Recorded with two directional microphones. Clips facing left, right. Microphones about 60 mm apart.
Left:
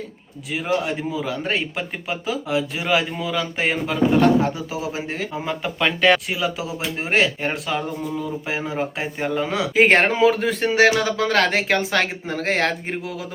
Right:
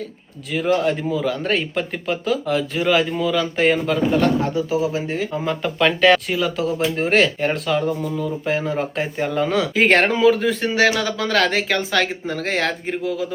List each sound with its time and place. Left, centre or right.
0.5 s speech: centre
4.2 s speech: left
5.3 s speech: centre; by 13.2 s left